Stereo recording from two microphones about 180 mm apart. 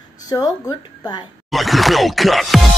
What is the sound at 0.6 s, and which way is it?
Speech, 20° left (ahead or behind).